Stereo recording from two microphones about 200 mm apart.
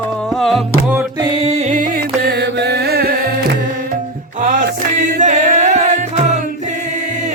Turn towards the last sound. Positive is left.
turn(degrees=-35)  # may be behind; listen again after turning